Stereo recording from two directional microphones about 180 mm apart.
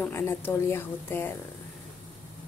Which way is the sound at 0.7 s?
15° left (ahead or behind).